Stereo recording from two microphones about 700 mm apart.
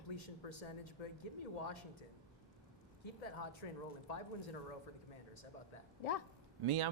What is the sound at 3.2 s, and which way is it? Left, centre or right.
Speech, left.